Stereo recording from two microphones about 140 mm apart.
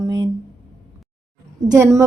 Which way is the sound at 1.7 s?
20° right (ahead or behind).